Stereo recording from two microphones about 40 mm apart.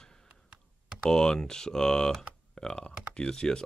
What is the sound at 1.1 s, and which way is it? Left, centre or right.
Speech, centre.